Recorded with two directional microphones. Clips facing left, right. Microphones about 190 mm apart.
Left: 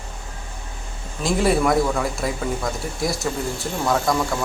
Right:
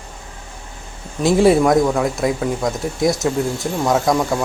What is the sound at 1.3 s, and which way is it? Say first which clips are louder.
Speech: right 6 dB; 25° right (ahead or behind).